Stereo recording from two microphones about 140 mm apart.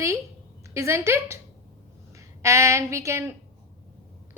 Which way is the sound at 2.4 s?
20° right (ahead or behind).